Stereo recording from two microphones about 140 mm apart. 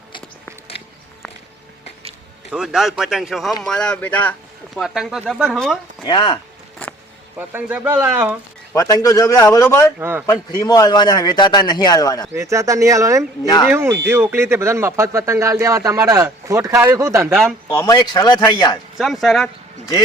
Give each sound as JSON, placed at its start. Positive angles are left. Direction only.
{"t": 2.5, "sound": "speech", "side_deg": -5}
{"t": 4.7, "sound": "speech", "side_deg": 0}
{"t": 6.1, "sound": "a man's voice", "side_deg": 35}
{"t": 7.3, "sound": "speech", "side_deg": -15}
{"t": 8.7, "sound": "a man's voice", "side_deg": 25}
{"t": 10.0, "sound": "speech", "side_deg": -15}
{"t": 10.2, "sound": "a man's voice", "side_deg": 30}
{"t": 12.3, "sound": "speech", "side_deg": -20}
{"t": 13.4, "sound": "a man's voice", "side_deg": 30}
{"t": 13.7, "sound": "speech", "side_deg": -15}
{"t": 17.7, "sound": "a man's voice", "side_deg": 25}
{"t": 18.9, "sound": "speech", "side_deg": 0}